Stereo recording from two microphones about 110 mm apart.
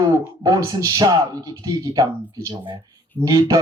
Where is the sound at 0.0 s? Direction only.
35° right (ahead or behind).